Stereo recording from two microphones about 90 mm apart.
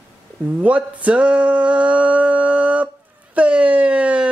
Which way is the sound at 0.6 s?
15° right (ahead or behind).